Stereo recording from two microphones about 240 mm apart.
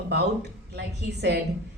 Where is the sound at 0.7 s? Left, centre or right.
Right.